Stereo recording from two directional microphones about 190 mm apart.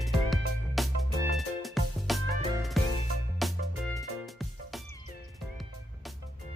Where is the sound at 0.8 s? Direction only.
Centre (ahead or behind).